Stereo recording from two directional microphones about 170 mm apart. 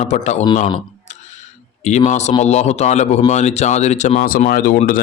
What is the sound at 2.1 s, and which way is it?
A man's voice, 40° left (ahead or behind).